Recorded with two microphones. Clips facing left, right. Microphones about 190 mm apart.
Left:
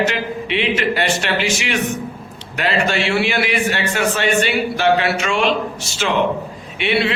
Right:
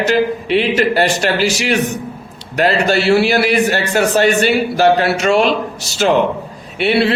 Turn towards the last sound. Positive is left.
turn(degrees=-40)  # may be behind; listen again after turning